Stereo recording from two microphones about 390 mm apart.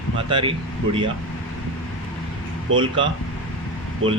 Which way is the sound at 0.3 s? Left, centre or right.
Centre.